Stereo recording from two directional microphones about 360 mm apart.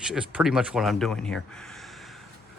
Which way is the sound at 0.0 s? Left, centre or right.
Centre.